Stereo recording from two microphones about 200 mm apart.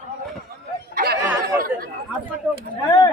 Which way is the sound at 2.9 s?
20° left (ahead or behind).